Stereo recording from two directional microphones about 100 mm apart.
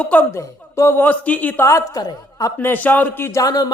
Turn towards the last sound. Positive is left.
turn(degrees=40)  # may be behind; listen again after turning